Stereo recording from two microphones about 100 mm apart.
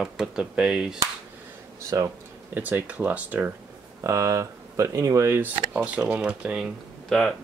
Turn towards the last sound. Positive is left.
turn(degrees=5)  # may be behind; listen again after turning